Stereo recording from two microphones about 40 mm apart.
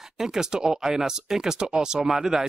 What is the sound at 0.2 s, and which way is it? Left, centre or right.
Speech, centre.